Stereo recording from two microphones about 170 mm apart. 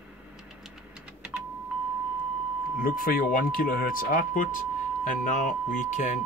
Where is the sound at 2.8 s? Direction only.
55° left (ahead or behind).